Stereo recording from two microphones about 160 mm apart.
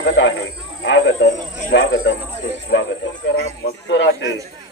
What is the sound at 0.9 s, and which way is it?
A man's voice, 90° left.